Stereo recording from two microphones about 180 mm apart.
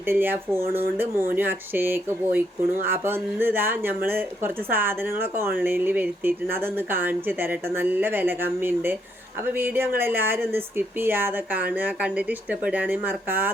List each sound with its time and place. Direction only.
0.1 s speech: 10° right (ahead or behind)